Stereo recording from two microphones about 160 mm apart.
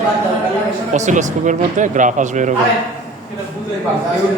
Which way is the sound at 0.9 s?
50° right (ahead or behind).